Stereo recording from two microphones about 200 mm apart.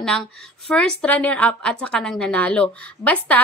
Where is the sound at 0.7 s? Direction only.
5° left (ahead or behind).